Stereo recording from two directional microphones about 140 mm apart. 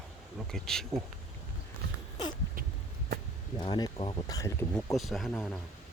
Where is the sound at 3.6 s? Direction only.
30° left (ahead or behind).